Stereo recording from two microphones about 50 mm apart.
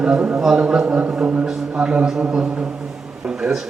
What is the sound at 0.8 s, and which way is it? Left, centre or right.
Speech, right.